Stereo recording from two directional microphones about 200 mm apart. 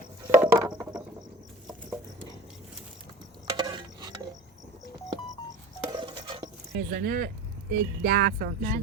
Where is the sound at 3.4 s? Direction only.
20° right (ahead or behind).